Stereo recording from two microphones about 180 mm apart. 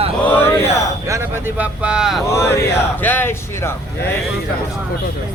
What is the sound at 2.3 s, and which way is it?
Speech, 15° left (ahead or behind).